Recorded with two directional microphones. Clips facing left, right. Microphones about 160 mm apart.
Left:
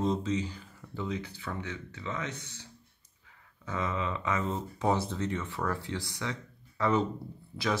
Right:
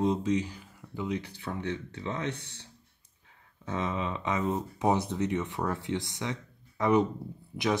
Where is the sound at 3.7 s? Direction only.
20° right (ahead or behind).